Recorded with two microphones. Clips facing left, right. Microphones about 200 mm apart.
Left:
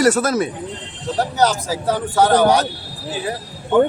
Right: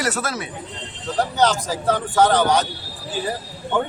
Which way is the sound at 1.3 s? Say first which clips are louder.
Left 1 dB; 10° left (ahead or behind).